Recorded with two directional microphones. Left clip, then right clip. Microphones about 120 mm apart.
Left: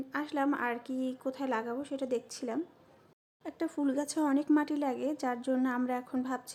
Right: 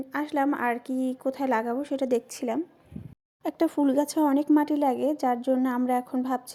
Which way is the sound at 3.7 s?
45° right (ahead or behind).